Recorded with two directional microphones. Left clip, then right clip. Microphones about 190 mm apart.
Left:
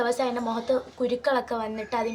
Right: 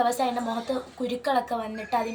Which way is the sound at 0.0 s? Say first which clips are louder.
Right 1 dB; 10° left (ahead or behind).